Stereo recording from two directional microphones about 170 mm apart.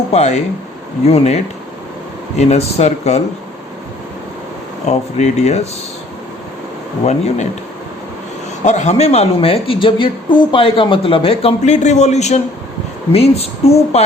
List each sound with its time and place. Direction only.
0.1 s a woman's voice: 40° left (ahead or behind)
2.4 s a woman's voice: 40° left (ahead or behind)
4.9 s a woman's voice: 45° left (ahead or behind)
7.0 s speech: 40° left (ahead or behind)
8.6 s a woman's voice: 45° left (ahead or behind)